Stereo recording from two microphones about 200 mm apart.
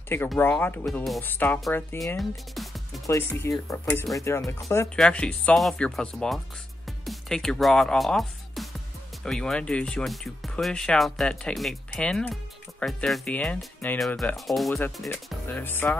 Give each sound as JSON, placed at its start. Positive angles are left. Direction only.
{"t": 0.4, "sound": "speech", "side_deg": 10}
{"t": 3.3, "sound": "speech", "side_deg": 15}
{"t": 6.9, "sound": "music", "side_deg": 0}
{"t": 9.2, "sound": "speech", "side_deg": 5}